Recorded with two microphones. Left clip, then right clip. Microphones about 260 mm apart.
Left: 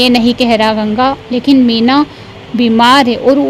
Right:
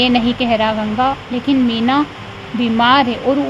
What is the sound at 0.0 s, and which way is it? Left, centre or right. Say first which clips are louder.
Speech: left 5 dB; left.